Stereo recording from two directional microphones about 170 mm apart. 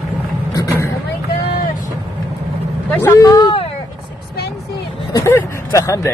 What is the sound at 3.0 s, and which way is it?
Vehicle, 15° left (ahead or behind).